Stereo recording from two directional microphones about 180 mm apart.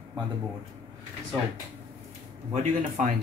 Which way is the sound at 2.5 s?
40° right (ahead or behind).